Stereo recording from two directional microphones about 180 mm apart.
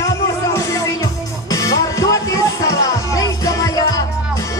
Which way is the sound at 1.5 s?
20° left (ahead or behind).